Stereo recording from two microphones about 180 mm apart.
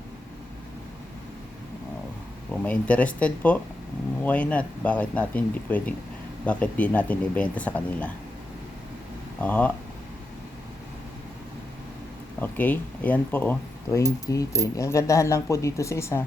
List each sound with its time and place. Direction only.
2.5 s speech: 5° left (ahead or behind)
9.4 s speech: 10° left (ahead or behind)
12.4 s speech: 10° left (ahead or behind)